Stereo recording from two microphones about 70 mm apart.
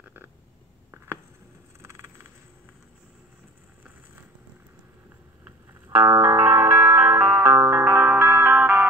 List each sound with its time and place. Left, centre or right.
0.9 s a sound: right
1.8 s vehicle: right
5.9 s music: right
8.5 s music: right